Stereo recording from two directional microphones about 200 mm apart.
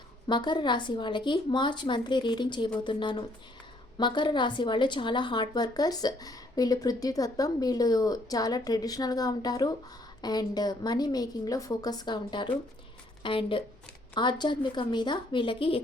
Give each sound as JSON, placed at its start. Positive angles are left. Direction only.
{"t": 0.3, "sound": "a woman's voice", "side_deg": 20}